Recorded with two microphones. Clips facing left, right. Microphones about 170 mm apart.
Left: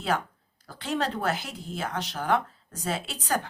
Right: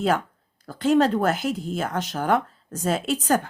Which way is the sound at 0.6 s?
45° right (ahead or behind).